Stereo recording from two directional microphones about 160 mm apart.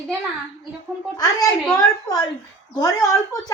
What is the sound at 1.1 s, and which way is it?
A woman's voice, 20° left (ahead or behind).